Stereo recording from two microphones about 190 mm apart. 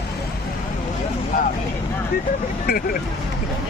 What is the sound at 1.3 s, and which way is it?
Vehicle, 45° left (ahead or behind).